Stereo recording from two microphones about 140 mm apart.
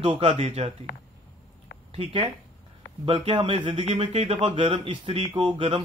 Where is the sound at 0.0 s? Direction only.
45° right (ahead or behind).